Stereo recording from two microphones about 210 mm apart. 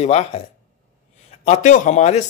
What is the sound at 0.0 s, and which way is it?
Speech, 30° left (ahead or behind).